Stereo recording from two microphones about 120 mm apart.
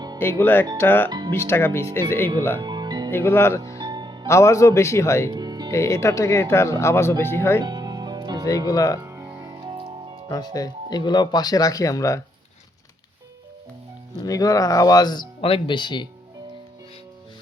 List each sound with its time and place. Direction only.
0.2 s speech: 20° left (ahead or behind)
2.6 s music: 35° right (ahead or behind)
3.1 s speech: 20° left (ahead or behind)
3.8 s music: 40° right (ahead or behind)
4.3 s speech: 25° left (ahead or behind)
5.3 s music: 35° right (ahead or behind)
5.7 s speech: 25° left (ahead or behind)
7.6 s music: 35° right (ahead or behind)
8.4 s speech: 30° left (ahead or behind)
9.0 s music: 20° right (ahead or behind)
9.5 s music: 40° right (ahead or behind)
10.2 s speech: 30° left (ahead or behind)
14.2 s speech: 30° left (ahead or behind)